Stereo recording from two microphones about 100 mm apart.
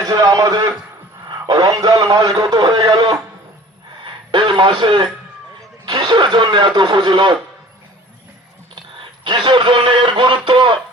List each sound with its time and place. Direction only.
0.0 s a man's voice: 40° right (ahead or behind)
4.0 s a sound: 50° right (ahead or behind)
5.8 s a man's voice: 40° right (ahead or behind)
9.2 s a man's voice: 50° right (ahead or behind)